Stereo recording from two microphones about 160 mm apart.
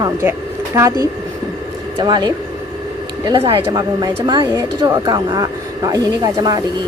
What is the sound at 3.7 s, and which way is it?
Speech, 25° right (ahead or behind).